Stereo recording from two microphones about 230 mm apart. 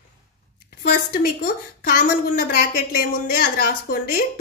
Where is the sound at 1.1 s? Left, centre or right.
Left.